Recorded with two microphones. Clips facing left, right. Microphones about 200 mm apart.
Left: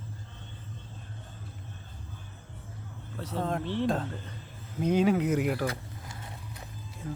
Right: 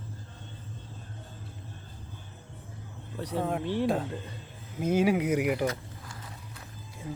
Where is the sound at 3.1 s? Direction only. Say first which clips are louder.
Right 1 dB; 15° right (ahead or behind).